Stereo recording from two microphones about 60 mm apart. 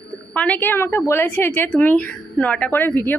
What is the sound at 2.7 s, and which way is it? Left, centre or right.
Speech, left.